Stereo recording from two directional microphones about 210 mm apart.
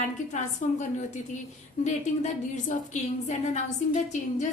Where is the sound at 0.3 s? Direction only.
35° left (ahead or behind).